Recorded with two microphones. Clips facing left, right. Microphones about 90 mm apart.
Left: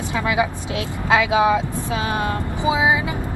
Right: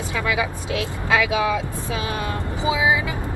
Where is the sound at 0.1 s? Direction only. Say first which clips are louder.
Left 3 dB; 25° left (ahead or behind).